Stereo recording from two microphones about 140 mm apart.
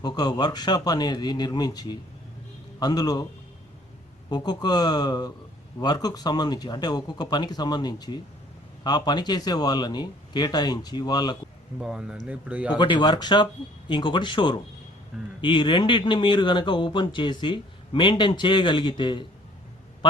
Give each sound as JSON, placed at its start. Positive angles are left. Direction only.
{"t": 0.0, "sound": "speech", "side_deg": 30}
{"t": 4.3, "sound": "speech", "side_deg": 30}
{"t": 11.8, "sound": "speech", "side_deg": -5}
{"t": 12.8, "sound": "speech", "side_deg": 35}